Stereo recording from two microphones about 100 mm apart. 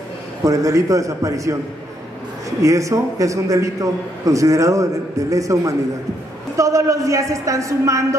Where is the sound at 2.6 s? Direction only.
35° right (ahead or behind).